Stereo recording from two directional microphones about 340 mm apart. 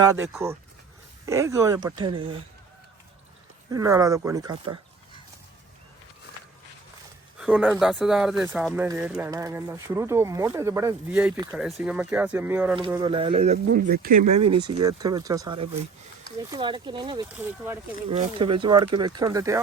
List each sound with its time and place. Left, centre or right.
0.0 s speech: centre
3.7 s speech: centre
7.3 s speech: centre; by 14.1 s right
14.3 s speech: centre